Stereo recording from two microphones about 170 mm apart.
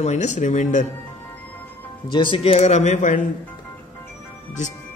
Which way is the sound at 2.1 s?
30° left (ahead or behind).